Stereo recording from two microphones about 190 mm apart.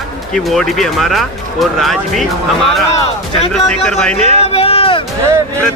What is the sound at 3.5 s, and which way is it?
Speech, centre (ahead or behind).